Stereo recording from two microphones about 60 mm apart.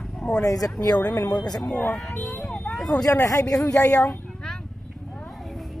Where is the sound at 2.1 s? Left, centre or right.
Left.